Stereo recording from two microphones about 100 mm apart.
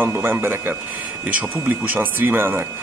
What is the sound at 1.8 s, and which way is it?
Speech, 20° right (ahead or behind).